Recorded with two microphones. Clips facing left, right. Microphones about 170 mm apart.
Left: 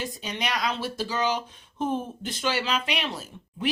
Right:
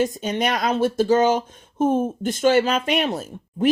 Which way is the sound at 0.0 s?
45° right (ahead or behind).